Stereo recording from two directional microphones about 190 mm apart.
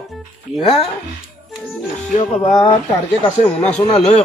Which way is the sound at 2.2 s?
30° left (ahead or behind).